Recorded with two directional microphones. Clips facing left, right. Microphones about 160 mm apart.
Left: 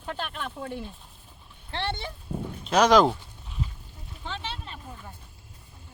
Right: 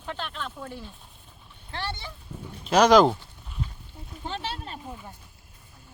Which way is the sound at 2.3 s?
60° left (ahead or behind).